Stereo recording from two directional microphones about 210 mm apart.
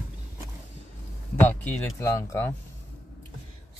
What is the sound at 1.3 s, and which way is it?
Speech, 10° left (ahead or behind).